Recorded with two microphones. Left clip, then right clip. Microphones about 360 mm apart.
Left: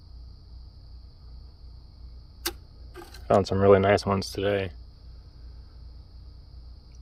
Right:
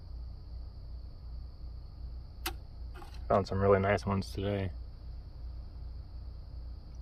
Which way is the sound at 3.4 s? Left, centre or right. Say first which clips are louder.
Left 9 dB; left.